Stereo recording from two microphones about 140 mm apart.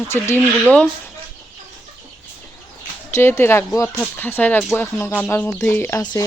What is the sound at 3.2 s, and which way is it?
Speech, 15° left (ahead or behind).